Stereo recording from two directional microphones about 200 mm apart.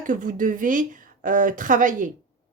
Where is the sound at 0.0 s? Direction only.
40° right (ahead or behind).